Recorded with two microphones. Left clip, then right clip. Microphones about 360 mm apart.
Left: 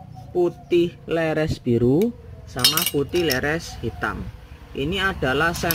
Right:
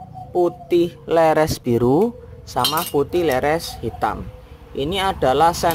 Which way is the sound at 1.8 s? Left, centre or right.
Right.